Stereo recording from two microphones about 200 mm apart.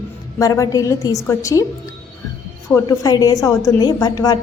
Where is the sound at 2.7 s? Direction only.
20° left (ahead or behind).